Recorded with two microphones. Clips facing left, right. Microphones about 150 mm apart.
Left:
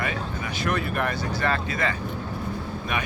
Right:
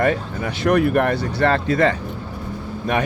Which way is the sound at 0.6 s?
70° right (ahead or behind).